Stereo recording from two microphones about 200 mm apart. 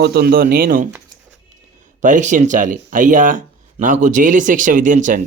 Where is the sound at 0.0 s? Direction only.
50° right (ahead or behind).